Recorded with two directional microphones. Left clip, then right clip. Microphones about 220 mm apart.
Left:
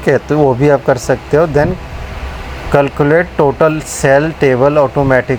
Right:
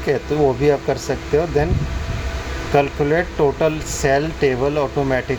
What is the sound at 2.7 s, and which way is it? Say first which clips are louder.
Speech: left 7 dB; 25° left (ahead or behind).